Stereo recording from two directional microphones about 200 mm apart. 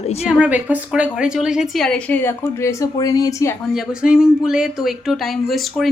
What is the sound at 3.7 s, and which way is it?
A woman's voice, 5° right (ahead or behind).